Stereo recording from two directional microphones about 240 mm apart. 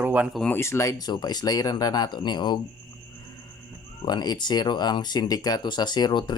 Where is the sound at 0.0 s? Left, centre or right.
Centre.